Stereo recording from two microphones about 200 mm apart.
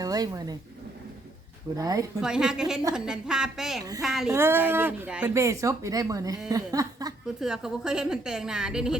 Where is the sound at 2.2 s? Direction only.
5° right (ahead or behind).